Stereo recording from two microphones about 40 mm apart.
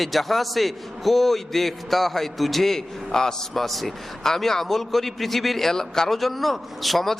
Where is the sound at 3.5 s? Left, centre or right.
Centre.